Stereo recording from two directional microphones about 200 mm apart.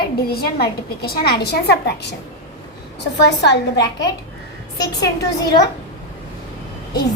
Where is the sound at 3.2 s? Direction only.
60° left (ahead or behind).